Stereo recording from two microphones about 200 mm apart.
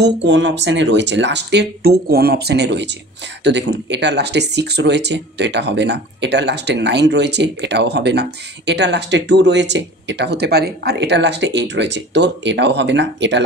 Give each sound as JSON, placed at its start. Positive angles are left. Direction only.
{"t": 0.0, "sound": "speech", "side_deg": -65}